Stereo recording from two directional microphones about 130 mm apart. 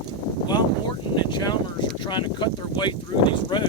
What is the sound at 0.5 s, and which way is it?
Speech, 35° left (ahead or behind).